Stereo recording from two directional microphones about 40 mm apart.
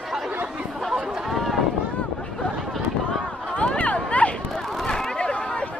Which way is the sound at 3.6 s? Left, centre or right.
Left.